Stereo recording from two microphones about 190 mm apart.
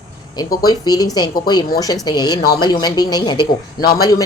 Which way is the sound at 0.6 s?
20° left (ahead or behind).